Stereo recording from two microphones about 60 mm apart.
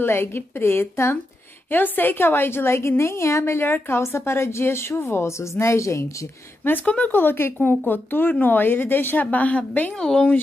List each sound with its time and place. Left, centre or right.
0.0 s a woman's voice: left
6.6 s a woman's voice: left; by 10.3 s centre